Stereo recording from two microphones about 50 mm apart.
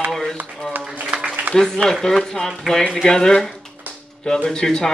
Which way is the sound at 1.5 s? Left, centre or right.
Right.